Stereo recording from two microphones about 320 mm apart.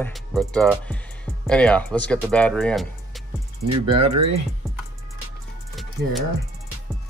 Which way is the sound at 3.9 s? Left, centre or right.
Centre.